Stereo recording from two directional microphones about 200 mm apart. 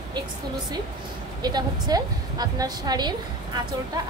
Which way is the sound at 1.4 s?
20° right (ahead or behind).